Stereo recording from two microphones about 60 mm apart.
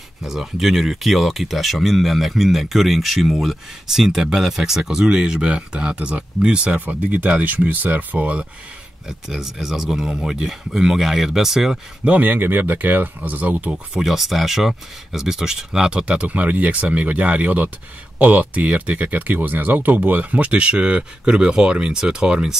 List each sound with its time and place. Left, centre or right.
0.2 s speech: centre; by 8.5 s right
9.3 s speech: centre
12.1 s speech: right
14.0 s speech: centre